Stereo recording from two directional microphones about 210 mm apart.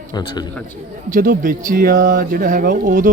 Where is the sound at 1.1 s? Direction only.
40° right (ahead or behind).